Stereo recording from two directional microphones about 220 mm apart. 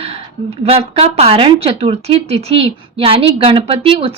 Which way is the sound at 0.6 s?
25° right (ahead or behind).